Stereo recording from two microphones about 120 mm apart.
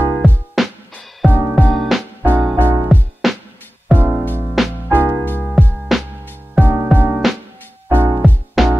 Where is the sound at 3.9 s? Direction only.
15° right (ahead or behind).